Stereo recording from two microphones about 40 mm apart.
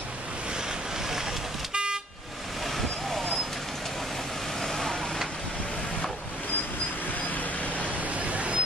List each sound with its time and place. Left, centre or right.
1.7 s vehicle: right
4.6 s vehicle: centre
8.2 s a sound: right